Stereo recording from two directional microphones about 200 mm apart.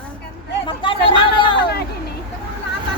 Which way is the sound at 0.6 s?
25° left (ahead or behind).